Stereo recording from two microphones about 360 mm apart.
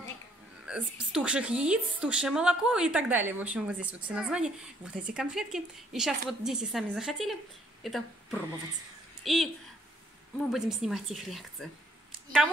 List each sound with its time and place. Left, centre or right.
0.7 s a woman's voice: centre
10.5 s a woman's voice: centre